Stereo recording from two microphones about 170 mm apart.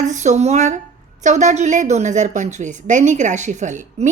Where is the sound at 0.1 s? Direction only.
45° right (ahead or behind).